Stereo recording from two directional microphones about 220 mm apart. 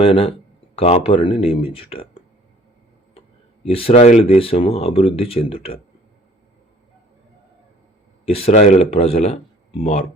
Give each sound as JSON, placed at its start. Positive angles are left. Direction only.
{"t": 0.0, "sound": "speech", "side_deg": 25}
{"t": 3.2, "sound": "a sound", "side_deg": 25}
{"t": 4.4, "sound": "speech", "side_deg": 25}
{"t": 8.2, "sound": "speech", "side_deg": 25}